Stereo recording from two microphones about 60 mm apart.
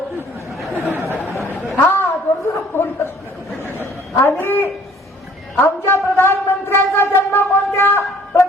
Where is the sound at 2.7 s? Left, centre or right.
Left.